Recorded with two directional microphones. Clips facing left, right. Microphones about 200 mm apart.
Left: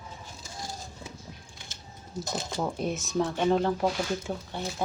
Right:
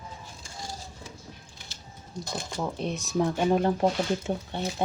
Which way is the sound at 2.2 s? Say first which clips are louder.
Left 1 dB; 5° left (ahead or behind).